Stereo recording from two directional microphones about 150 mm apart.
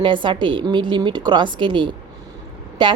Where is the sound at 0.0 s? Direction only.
35° right (ahead or behind).